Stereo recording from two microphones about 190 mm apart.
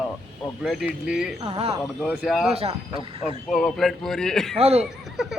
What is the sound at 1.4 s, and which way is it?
Speech, 30° right (ahead or behind).